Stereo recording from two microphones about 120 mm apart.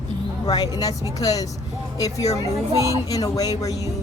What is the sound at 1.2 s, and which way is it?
Speech, 30° left (ahead or behind).